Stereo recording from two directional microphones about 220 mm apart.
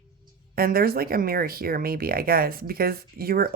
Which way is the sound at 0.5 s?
40° right (ahead or behind).